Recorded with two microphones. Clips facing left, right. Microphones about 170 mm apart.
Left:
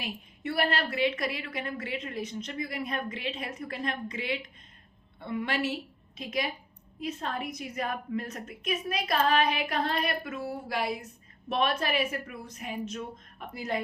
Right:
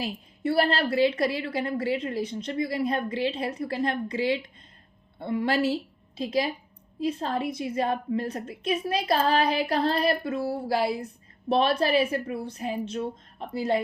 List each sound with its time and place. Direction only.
0.0 s a woman's voice: 35° right (ahead or behind)